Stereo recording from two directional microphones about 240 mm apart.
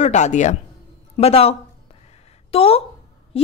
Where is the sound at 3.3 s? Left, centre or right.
Left.